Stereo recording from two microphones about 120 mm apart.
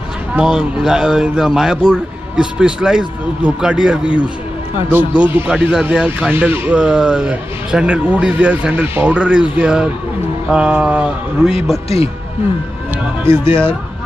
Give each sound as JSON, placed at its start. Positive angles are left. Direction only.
{"t": 0.4, "sound": "a man's voice", "side_deg": -5}
{"t": 6.3, "sound": "a man's voice", "side_deg": -15}
{"t": 13.2, "sound": "speech", "side_deg": -20}